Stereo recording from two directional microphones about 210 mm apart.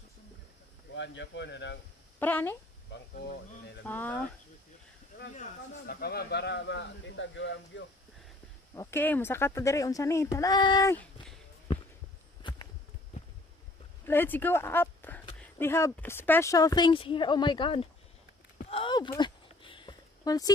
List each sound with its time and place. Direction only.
0.9 s speech: 60° left (ahead or behind)
2.1 s speech: 10° left (ahead or behind)
2.9 s speech: 45° left (ahead or behind)
3.8 s speech: 10° left (ahead or behind)
5.3 s speech: 40° left (ahead or behind); by 7.8 s 60° left (ahead or behind)
8.7 s speech: 10° left (ahead or behind)
12.4 s a sound: 20° left (ahead or behind)
14.0 s speech: 10° left (ahead or behind)
18.7 s a sound: 25° left (ahead or behind)